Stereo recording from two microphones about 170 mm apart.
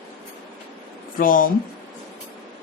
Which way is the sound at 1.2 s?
55° left (ahead or behind).